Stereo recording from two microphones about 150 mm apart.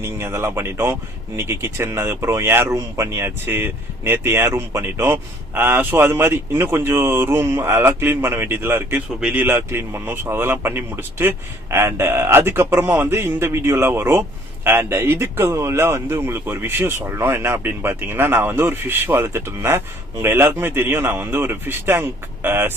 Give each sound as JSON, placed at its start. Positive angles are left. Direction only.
{"t": 0.0, "sound": "speech", "side_deg": -15}